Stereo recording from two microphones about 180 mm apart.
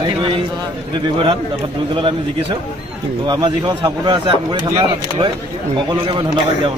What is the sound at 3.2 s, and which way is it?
A man's voice, 25° right (ahead or behind).